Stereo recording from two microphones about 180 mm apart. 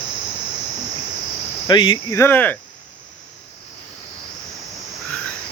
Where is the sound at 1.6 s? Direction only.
25° left (ahead or behind).